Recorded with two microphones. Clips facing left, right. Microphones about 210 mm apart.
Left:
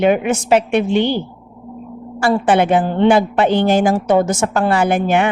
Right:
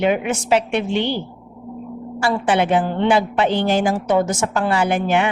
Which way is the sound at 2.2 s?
50° left (ahead or behind).